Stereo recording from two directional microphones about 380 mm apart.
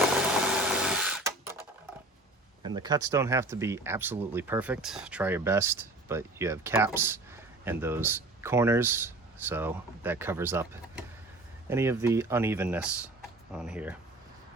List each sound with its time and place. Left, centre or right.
0.0 s sewing machine: centre
2.6 s speech: centre